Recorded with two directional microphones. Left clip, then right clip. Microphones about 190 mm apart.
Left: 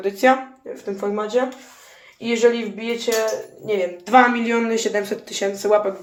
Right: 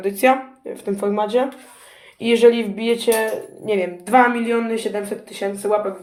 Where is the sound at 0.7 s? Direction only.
50° right (ahead or behind).